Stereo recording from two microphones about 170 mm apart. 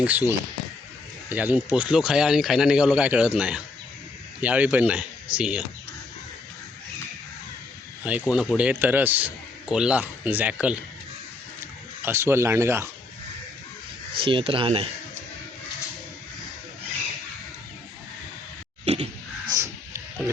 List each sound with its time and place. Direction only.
0.0 s speech: 10° right (ahead or behind)
8.2 s speech: 5° right (ahead or behind)
12.0 s speech: 15° right (ahead or behind)
14.2 s speech: 30° right (ahead or behind)
18.9 s a sound: 40° right (ahead or behind)
19.5 s a sound: 15° right (ahead or behind)